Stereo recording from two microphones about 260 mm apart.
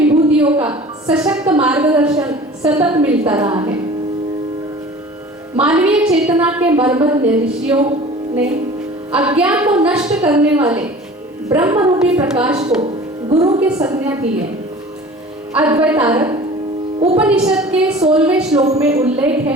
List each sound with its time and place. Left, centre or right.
0.6 s a woman's voice: centre
3.2 s a woman's voice: centre
5.5 s a woman's voice: centre
9.1 s a woman's voice: centre
13.3 s a woman's voice: right
13.6 s a woman's voice: centre
15.5 s a woman's voice: centre
17.2 s a woman's voice: centre